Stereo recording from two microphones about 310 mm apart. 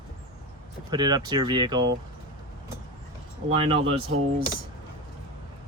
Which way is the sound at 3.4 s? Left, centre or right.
Centre.